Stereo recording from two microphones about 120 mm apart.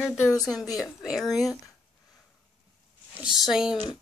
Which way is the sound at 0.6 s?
Centre (ahead or behind).